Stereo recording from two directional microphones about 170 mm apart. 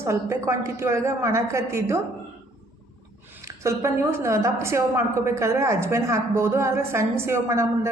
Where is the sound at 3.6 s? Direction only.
15° right (ahead or behind).